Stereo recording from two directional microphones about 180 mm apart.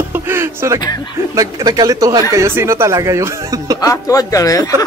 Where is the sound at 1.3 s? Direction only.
20° right (ahead or behind).